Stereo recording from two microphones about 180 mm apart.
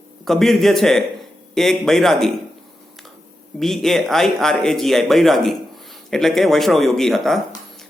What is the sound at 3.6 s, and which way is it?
Speech, centre (ahead or behind).